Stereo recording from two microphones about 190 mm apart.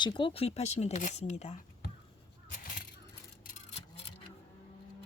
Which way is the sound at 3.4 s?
40° left (ahead or behind).